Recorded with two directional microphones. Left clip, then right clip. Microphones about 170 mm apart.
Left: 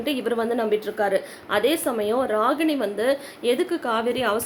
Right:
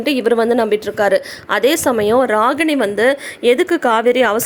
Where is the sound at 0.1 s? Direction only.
55° right (ahead or behind).